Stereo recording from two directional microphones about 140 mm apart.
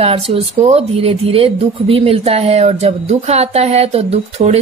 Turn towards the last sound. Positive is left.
turn(degrees=-50)  # may be behind; listen again after turning